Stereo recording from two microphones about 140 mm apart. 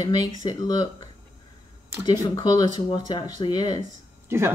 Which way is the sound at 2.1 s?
25° left (ahead or behind).